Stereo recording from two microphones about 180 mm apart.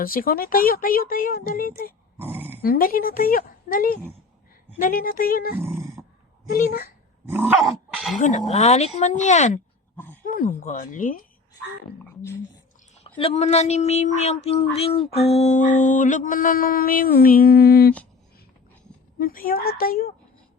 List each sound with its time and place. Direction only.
0.0 s mantra: 55° left (ahead or behind)
2.1 s dog: 10° right (ahead or behind)
2.6 s mantra: 55° left (ahead or behind)
5.5 s dog: 15° right (ahead or behind)
6.5 s speech: 55° left (ahead or behind)
7.3 s dog: 10° right (ahead or behind)
7.6 s speech: centre (ahead or behind)
8.2 s speech: 40° left (ahead or behind)
10.2 s mantra: 50° left (ahead or behind)
13.1 s speech: 35° left (ahead or behind)
15.8 s mantra: 45° left (ahead or behind)
19.2 s mantra: 50° left (ahead or behind)